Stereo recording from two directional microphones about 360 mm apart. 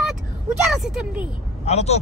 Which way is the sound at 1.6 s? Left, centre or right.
Centre.